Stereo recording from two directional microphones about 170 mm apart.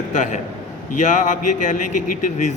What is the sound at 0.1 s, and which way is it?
A man's voice, 45° left (ahead or behind).